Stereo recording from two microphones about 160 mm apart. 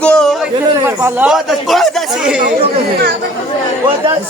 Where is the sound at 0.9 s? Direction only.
10° right (ahead or behind).